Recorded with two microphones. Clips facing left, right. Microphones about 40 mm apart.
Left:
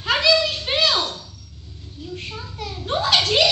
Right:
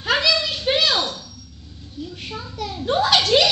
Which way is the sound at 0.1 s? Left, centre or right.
Left.